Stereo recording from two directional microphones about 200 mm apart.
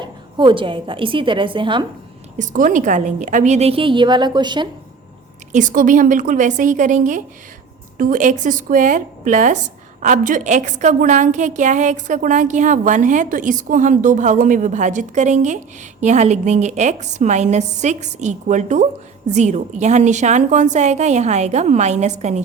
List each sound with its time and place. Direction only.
0.0 s a woman's voice: 25° right (ahead or behind)
2.4 s a woman's voice: 40° right (ahead or behind); by 4.7 s 20° right (ahead or behind)
5.5 s a woman's voice: 40° right (ahead or behind)